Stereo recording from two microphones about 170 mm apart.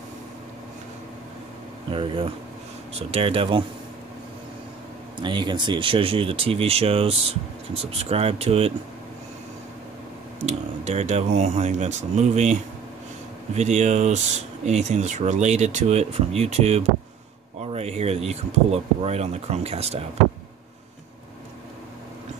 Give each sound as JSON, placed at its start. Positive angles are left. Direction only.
{"t": 1.9, "sound": "speech", "side_deg": -30}
{"t": 5.2, "sound": "speech", "side_deg": -25}
{"t": 10.4, "sound": "speech", "side_deg": -40}
{"t": 13.6, "sound": "speech", "side_deg": -45}